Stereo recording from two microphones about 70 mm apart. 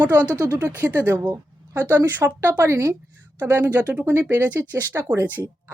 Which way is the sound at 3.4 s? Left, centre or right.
Right.